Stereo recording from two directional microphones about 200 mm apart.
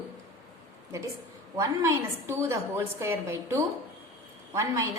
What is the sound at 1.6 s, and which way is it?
A woman's voice, 15° right (ahead or behind).